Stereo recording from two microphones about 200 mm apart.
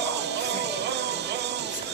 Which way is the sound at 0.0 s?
60° right (ahead or behind).